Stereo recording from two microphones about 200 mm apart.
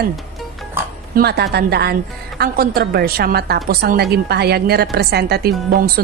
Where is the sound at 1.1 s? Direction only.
50° right (ahead or behind).